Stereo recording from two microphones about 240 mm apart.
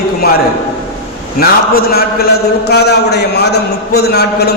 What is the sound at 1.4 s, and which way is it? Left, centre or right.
A man's voice, left.